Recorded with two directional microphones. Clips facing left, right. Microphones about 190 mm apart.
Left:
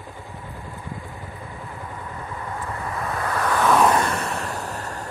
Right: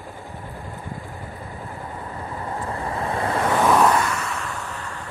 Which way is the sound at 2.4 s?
30° right (ahead or behind).